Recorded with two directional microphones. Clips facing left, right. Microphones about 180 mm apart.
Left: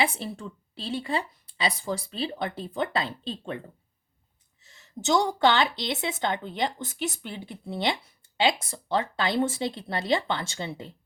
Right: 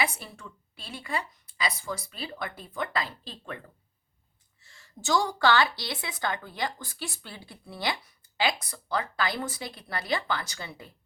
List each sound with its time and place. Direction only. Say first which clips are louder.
0.0 s a woman's voice: left 4 dB; 30° left (ahead or behind)
4.6 s a woman's voice: left 5 dB; 20° left (ahead or behind)